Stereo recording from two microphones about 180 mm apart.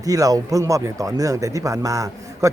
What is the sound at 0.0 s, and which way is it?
Speech, 20° right (ahead or behind).